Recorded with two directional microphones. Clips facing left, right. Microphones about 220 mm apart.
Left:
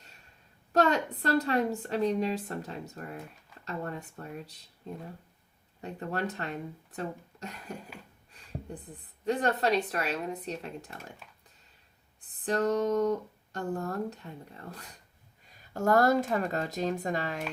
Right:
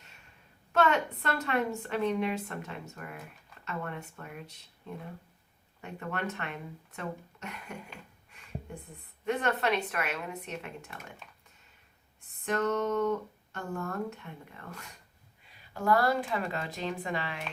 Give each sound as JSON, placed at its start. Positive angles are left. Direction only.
{"t": 0.7, "sound": "a woman's voice", "side_deg": 35}
{"t": 9.2, "sound": "a woman's voice", "side_deg": 35}
{"t": 12.5, "sound": "a woman's voice", "side_deg": 35}